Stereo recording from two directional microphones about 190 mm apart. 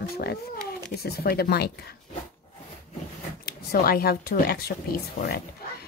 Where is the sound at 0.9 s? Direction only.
55° left (ahead or behind).